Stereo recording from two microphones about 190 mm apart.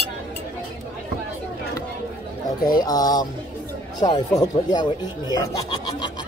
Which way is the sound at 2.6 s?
20° left (ahead or behind).